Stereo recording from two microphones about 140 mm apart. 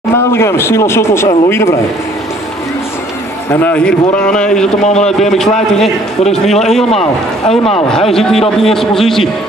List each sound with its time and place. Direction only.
0.1 s speech: 15° left (ahead or behind)
3.5 s a man's voice: 10° left (ahead or behind)
4.8 s speech: 55° left (ahead or behind)
5.2 s a man's voice: 5° left (ahead or behind)
6.9 s speech: 45° left (ahead or behind)
8.1 s a man's voice: centre (ahead or behind)